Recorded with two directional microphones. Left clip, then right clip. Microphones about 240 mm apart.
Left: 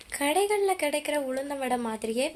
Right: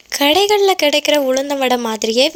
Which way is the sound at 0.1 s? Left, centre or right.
Right.